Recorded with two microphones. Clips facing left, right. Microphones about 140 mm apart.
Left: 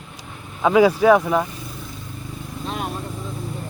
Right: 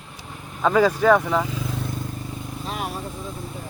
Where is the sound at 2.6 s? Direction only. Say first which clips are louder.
Left 2 dB; centre (ahead or behind).